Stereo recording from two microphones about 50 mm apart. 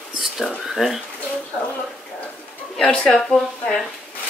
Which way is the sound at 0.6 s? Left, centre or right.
Centre.